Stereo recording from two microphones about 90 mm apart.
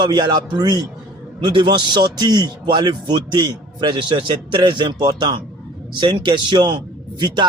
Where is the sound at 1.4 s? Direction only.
65° right (ahead or behind).